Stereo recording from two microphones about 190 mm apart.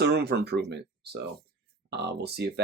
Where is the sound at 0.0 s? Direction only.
60° right (ahead or behind).